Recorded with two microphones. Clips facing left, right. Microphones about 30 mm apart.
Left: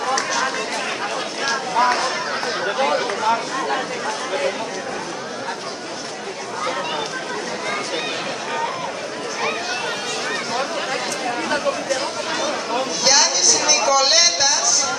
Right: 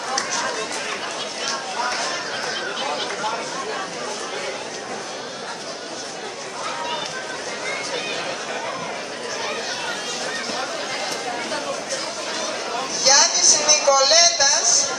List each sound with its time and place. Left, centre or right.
0.3 s chatter: centre
1.8 s speech: left
13.0 s speech: centre